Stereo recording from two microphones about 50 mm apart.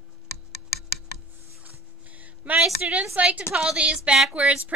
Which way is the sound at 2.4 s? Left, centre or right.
Right.